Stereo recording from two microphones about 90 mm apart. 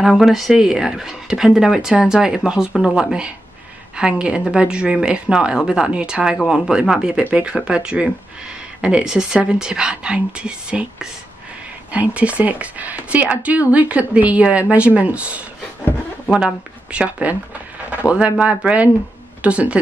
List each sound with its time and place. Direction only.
0.0 s speech: 5° right (ahead or behind)